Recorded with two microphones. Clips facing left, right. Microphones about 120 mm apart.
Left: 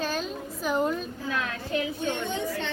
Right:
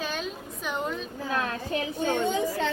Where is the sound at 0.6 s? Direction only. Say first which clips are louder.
Left 6 dB; centre (ahead or behind).